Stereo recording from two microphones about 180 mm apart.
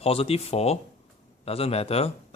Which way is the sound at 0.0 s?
35° left (ahead or behind).